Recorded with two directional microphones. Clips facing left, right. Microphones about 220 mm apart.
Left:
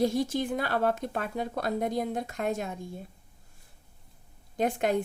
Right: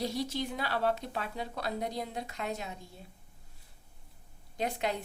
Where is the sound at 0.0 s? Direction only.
50° left (ahead or behind).